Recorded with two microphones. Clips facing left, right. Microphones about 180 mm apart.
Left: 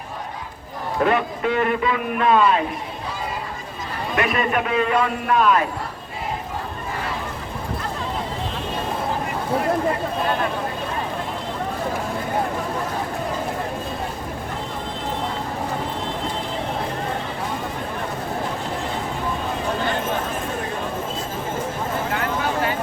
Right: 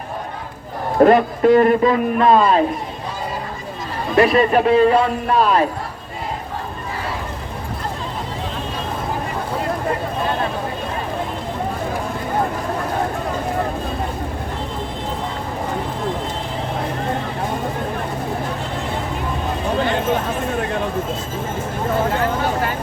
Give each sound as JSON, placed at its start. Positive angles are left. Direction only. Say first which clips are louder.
{"t": 0.9, "sound": "a man's voice", "louder": "right 8 dB", "side_deg": -40}
{"t": 4.1, "sound": "a man's voice", "louder": "right 8 dB", "side_deg": -35}